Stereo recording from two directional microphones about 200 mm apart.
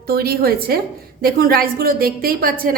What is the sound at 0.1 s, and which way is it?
A woman's voice, 50° right (ahead or behind).